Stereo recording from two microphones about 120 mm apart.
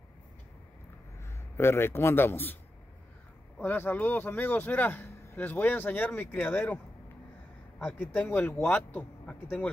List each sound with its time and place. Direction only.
1.2 s a man's voice: 20° left (ahead or behind)
3.5 s speech: 15° left (ahead or behind)
7.8 s speech: 15° left (ahead or behind)